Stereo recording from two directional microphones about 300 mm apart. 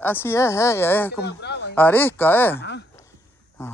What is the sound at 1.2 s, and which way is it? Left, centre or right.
Speech, left.